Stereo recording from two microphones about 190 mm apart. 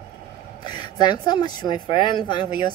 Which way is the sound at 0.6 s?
25° left (ahead or behind).